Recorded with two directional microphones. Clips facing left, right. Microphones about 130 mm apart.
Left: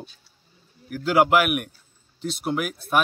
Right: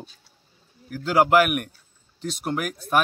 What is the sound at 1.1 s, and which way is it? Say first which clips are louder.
Speech: right 1 dB; 5° left (ahead or behind).